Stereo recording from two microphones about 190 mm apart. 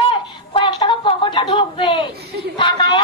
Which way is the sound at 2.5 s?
25° left (ahead or behind).